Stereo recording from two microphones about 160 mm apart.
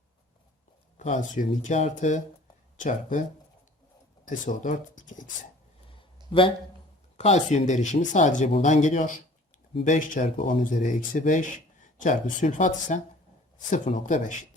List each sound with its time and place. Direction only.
0.9 s speech: 50° left (ahead or behind)
4.3 s speech: 50° left (ahead or behind)
7.2 s speech: 45° left (ahead or behind)